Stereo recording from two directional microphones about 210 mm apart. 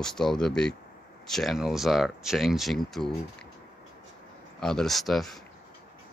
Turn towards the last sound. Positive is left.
turn(degrees=0)  # may be behind; listen again after turning